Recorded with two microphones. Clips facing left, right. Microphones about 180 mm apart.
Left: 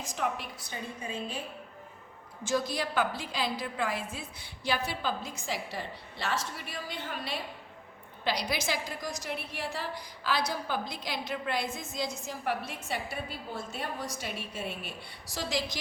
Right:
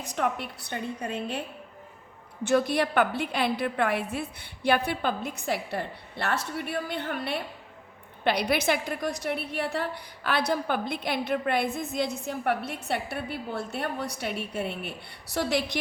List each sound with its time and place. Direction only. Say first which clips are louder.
0.0 s a woman's voice: right 4 dB; 65° right (ahead or behind)